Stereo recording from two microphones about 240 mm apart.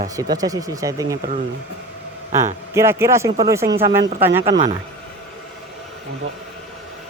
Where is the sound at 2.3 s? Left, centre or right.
Centre.